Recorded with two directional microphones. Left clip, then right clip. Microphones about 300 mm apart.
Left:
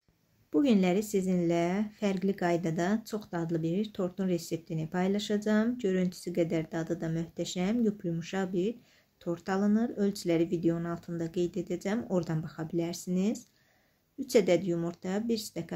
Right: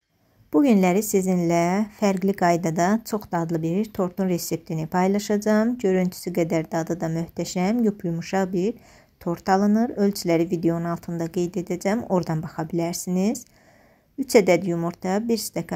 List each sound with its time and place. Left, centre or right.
0.5 s a woman's voice: centre